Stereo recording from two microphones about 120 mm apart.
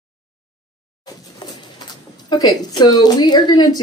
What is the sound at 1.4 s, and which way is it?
Pigeon, 40° left (ahead or behind).